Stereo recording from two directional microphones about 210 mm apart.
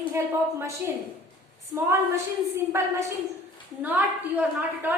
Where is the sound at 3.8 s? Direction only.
10° right (ahead or behind).